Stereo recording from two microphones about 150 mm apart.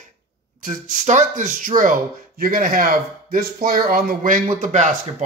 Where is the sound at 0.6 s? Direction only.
55° right (ahead or behind).